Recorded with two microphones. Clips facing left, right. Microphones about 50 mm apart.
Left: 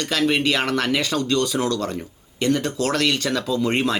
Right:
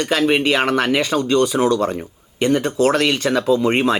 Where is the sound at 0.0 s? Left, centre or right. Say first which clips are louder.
Right 4 dB; right.